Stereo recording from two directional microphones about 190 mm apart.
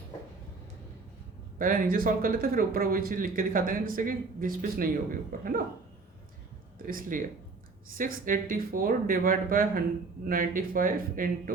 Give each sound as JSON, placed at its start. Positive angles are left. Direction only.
{"t": 1.5, "sound": "speech", "side_deg": -45}
{"t": 6.8, "sound": "speech", "side_deg": -45}